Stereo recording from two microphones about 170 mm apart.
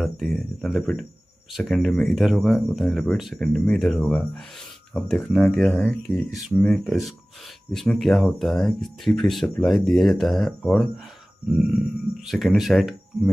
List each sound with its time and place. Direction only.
0.0 s speech: centre (ahead or behind)